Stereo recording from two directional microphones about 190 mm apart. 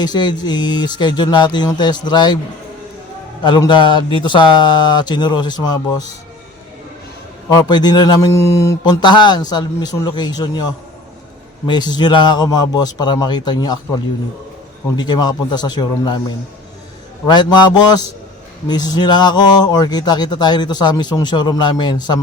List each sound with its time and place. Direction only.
0.0 s a man's voice: 20° left (ahead or behind)
3.4 s a man's voice: 25° left (ahead or behind)
7.5 s a man's voice: 20° left (ahead or behind)
11.6 s a man's voice: 25° left (ahead or behind)
17.2 s a man's voice: 25° left (ahead or behind)